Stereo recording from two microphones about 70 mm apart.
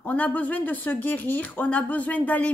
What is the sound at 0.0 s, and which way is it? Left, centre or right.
A woman's voice, left.